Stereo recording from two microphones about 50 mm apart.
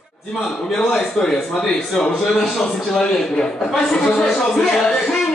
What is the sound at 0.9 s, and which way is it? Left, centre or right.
Speech, centre.